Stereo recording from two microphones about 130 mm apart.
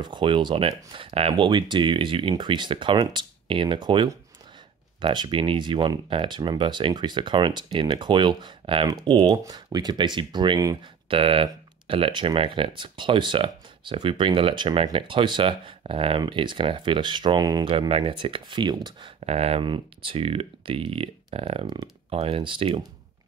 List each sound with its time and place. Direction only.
0.0 s speech: 40° right (ahead or behind)
11.1 s speech: 45° right (ahead or behind)
17.6 s speech: 45° right (ahead or behind)
19.1 s speech: 50° right (ahead or behind)